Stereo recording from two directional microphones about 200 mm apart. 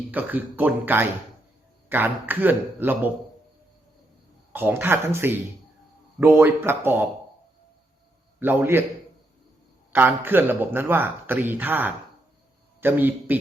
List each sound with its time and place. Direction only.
0.1 s speech: 10° right (ahead or behind)
4.5 s speech: 10° right (ahead or behind)
8.4 s speech: 10° right (ahead or behind)
9.9 s speech: 10° right (ahead or behind)